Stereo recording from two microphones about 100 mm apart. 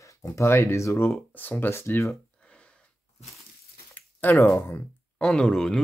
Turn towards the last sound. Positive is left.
turn(degrees=5)  # may be behind; listen again after turning